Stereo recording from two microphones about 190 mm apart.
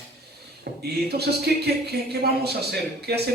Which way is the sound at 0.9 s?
55° right (ahead or behind).